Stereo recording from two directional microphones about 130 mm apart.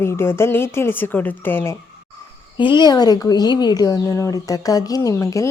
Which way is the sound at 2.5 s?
40° left (ahead or behind).